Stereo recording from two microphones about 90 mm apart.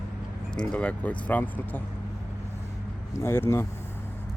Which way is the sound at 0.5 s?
15° left (ahead or behind).